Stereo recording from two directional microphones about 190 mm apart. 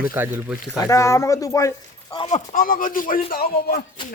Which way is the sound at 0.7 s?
15° left (ahead or behind).